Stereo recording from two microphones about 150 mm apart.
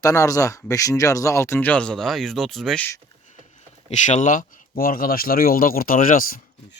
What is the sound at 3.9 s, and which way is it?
Speech, 55° left (ahead or behind).